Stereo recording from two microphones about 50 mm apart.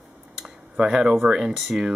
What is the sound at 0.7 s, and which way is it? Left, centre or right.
Speech, centre.